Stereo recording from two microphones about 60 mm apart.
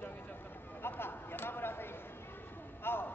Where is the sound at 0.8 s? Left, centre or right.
Left.